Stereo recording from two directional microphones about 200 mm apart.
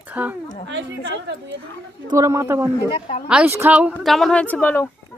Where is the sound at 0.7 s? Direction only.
60° right (ahead or behind).